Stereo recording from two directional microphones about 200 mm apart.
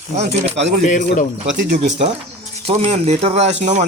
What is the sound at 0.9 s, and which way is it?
Speech, 40° left (ahead or behind).